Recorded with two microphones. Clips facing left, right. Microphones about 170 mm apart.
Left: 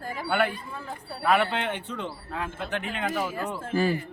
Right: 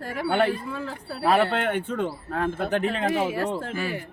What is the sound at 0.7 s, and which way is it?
Speech, 90° right.